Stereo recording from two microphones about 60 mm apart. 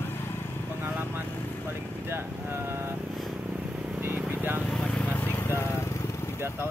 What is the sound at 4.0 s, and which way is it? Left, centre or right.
Vehicle, right.